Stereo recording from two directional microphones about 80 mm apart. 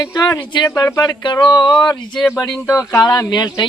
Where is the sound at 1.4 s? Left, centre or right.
Left.